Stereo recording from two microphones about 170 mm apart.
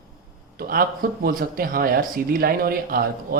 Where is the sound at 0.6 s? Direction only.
60° right (ahead or behind).